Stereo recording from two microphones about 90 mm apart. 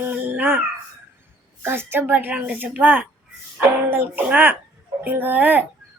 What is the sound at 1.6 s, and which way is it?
Speech, 25° right (ahead or behind).